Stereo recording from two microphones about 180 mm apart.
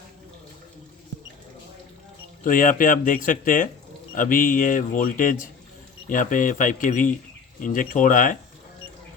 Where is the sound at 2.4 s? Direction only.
50° left (ahead or behind).